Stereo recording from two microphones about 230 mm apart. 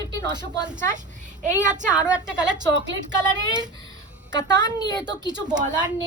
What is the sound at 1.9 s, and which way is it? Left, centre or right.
Speech, centre.